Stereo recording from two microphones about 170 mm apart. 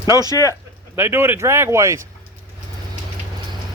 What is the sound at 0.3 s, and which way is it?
Speech, 20° left (ahead or behind).